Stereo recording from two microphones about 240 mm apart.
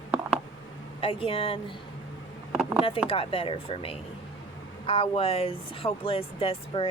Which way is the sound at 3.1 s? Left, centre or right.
Left.